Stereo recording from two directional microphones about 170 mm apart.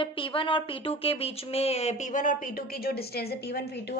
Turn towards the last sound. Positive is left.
turn(degrees=70)  # may be behind; listen again after turning